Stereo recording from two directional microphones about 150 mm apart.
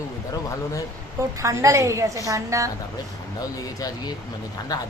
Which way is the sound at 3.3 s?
25° left (ahead or behind).